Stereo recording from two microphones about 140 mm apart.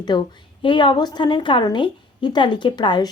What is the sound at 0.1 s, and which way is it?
A woman's voice, 30° left (ahead or behind).